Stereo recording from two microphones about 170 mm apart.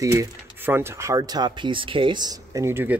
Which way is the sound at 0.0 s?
20° right (ahead or behind).